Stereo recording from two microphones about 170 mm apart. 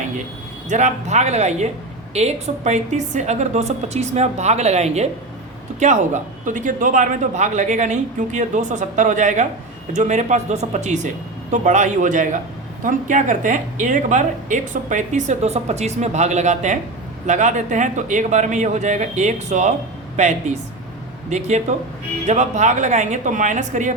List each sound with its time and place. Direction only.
0.7 s a woman's voice: 45° right (ahead or behind)